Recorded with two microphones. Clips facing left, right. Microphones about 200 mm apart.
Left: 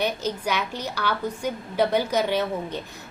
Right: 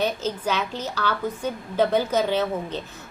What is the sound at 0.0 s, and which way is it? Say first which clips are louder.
A woman's voice: right 1 dB; 15° left (ahead or behind).